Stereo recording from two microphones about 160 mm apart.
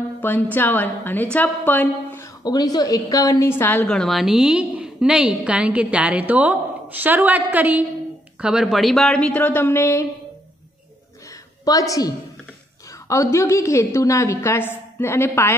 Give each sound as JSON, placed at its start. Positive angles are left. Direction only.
{"t": 0.2, "sound": "a woman's voice", "side_deg": 15}
{"t": 11.6, "sound": "a woman's voice", "side_deg": 20}
{"t": 13.1, "sound": "a woman's voice", "side_deg": 20}